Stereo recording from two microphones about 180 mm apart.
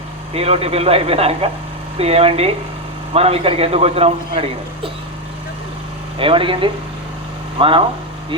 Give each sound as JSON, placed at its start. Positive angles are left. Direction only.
{"t": 0.3, "sound": "a man's voice", "side_deg": -35}
{"t": 6.1, "sound": "speech", "side_deg": -30}